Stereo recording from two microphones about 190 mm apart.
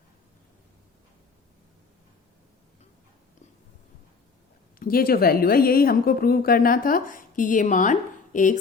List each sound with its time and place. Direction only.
4.8 s a woman's voice: 50° left (ahead or behind)